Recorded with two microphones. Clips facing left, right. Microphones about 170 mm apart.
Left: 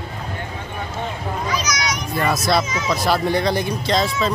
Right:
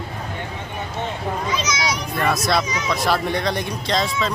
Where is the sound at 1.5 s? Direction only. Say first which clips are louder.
Even; 25° right (ahead or behind).